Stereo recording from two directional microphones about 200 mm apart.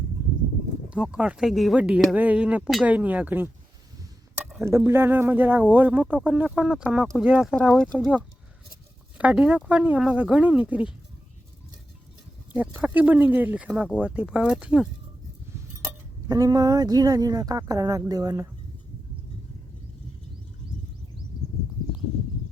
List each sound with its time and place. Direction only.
0.9 s speech: 5° right (ahead or behind)
12.5 s speech: 10° right (ahead or behind)
16.3 s speech: 20° right (ahead or behind)